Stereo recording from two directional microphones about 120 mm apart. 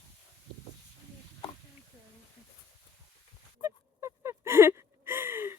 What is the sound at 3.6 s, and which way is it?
Gasp, 30° right (ahead or behind).